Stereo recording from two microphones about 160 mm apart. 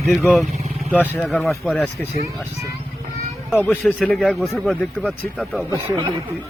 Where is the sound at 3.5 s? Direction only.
Centre (ahead or behind).